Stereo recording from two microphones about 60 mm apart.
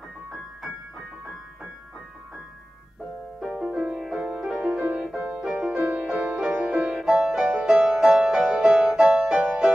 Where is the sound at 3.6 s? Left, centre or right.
Centre.